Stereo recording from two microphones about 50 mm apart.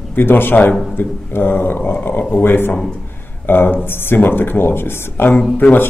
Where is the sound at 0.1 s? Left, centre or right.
Left.